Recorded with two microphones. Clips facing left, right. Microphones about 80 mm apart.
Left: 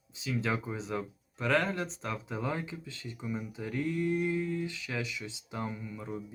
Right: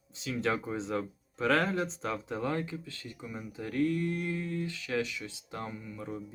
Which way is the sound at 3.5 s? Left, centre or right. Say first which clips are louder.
Right 6 dB; centre.